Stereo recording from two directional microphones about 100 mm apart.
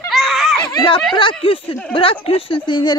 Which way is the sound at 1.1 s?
60° left (ahead or behind).